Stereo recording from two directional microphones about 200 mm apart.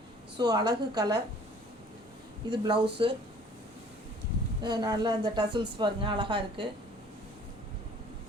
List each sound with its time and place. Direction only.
0.3 s speech: 20° right (ahead or behind)
2.5 s speech: 25° right (ahead or behind)
4.6 s speech: 20° right (ahead or behind)